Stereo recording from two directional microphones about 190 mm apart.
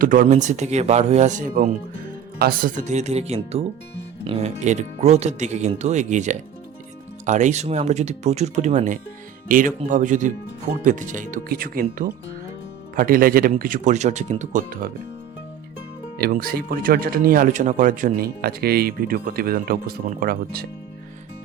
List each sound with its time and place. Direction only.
0.0 s speech: 45° right (ahead or behind)
16.1 s speech: 50° right (ahead or behind)